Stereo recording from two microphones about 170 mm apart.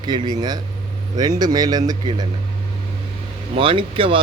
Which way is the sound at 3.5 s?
30° right (ahead or behind).